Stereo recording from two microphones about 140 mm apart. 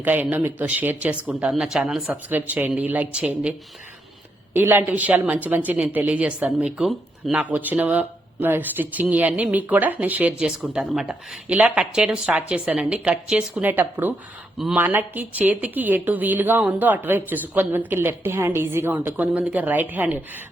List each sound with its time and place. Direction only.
0.0 s a woman's voice: 10° right (ahead or behind)
4.5 s a woman's voice: 15° right (ahead or behind)